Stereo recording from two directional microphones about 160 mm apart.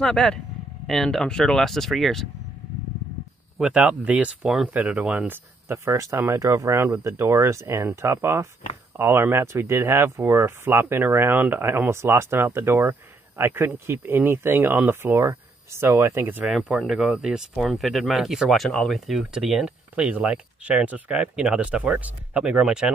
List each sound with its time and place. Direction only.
0.0 s speech: 5° left (ahead or behind)
3.5 s speech: 5° right (ahead or behind)